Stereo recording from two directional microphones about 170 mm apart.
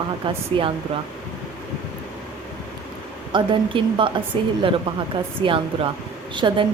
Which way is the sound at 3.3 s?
30° right (ahead or behind).